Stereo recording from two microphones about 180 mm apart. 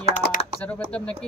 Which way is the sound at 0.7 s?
5° left (ahead or behind).